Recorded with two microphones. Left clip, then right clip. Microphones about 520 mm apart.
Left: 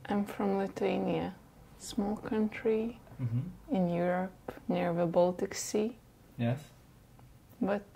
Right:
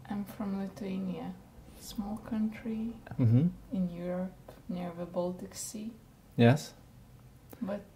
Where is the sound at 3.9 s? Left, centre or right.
Left.